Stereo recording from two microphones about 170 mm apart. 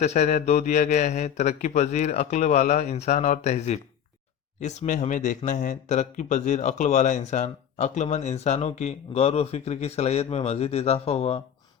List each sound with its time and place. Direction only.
0.0 s speech: 40° left (ahead or behind)